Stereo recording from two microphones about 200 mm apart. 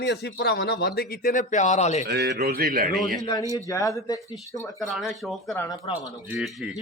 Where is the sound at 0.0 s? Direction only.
55° left (ahead or behind); by 2.0 s 35° left (ahead or behind).